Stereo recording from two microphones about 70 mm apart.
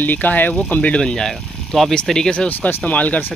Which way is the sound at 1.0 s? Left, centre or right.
Centre.